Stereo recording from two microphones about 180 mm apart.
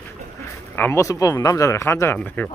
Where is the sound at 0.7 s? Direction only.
10° left (ahead or behind).